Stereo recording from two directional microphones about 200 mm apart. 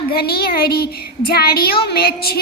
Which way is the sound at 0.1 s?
50° left (ahead or behind).